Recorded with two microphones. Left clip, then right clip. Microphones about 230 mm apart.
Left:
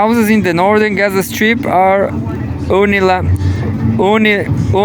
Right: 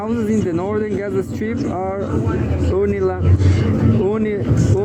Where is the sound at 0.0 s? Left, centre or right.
Left.